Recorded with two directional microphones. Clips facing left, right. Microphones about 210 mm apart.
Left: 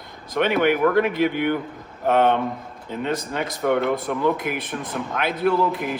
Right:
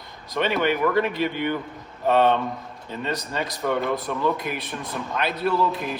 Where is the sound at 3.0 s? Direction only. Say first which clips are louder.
Left 2 dB; 55° left (ahead or behind).